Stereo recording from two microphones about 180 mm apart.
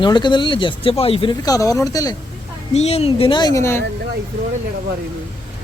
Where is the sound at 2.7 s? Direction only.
35° left (ahead or behind); by 3.8 s 15° left (ahead or behind).